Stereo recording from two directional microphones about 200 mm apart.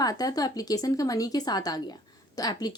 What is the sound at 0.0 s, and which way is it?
Speech, 20° left (ahead or behind).